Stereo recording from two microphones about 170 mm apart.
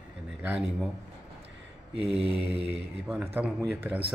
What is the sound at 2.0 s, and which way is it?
Mantra, 35° right (ahead or behind).